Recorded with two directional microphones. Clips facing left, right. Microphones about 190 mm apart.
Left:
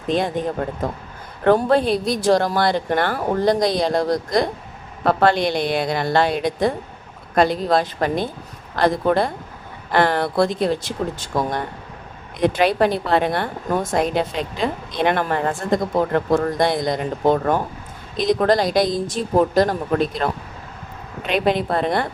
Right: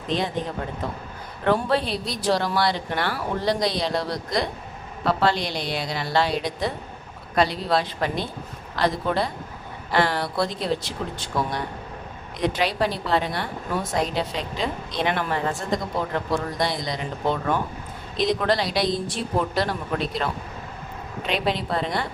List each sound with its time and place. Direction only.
0.1 s a woman's voice: 50° left (ahead or behind)